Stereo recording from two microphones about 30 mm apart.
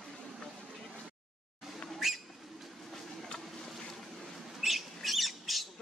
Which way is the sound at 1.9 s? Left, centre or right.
Centre.